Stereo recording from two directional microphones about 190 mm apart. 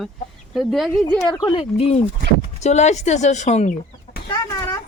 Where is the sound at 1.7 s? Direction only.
35° left (ahead or behind).